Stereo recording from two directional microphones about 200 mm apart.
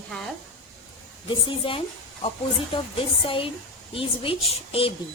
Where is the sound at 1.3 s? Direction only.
25° left (ahead or behind).